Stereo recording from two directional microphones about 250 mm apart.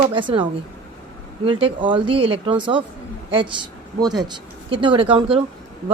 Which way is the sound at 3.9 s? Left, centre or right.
Centre.